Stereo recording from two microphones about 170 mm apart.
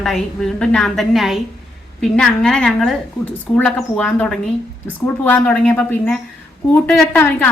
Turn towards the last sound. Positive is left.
turn(degrees=10)  # may be behind; listen again after turning